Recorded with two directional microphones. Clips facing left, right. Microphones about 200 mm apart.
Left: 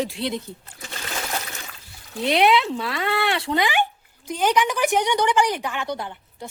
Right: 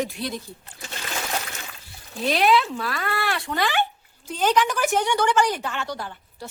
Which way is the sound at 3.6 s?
15° left (ahead or behind).